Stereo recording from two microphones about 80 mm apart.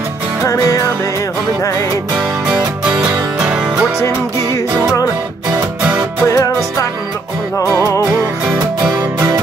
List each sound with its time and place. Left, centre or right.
0.4 s music: left
2.1 s music: centre
5.8 s music: centre
6.3 s music: left